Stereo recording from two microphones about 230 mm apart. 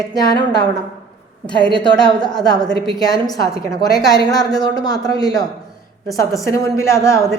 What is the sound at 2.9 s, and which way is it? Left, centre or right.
A woman's voice, centre.